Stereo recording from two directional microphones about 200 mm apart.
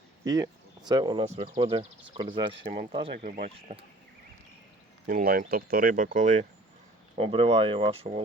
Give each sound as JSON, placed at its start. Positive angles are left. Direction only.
{"t": 0.3, "sound": "speech", "side_deg": -20}
{"t": 5.0, "sound": "speech", "side_deg": -45}
{"t": 7.2, "sound": "speech", "side_deg": -30}